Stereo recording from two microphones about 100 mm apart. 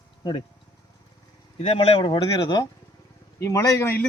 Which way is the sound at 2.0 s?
55° left (ahead or behind).